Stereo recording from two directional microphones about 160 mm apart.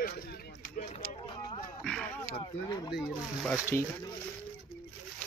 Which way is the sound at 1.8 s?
5° left (ahead or behind).